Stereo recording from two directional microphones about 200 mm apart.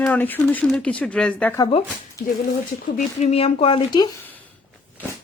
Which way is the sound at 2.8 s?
35° left (ahead or behind).